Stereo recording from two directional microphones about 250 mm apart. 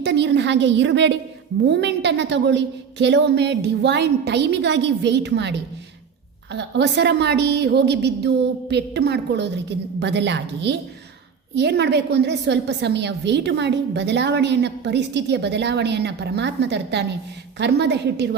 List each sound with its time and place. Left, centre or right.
0.0 s a woman's voice: right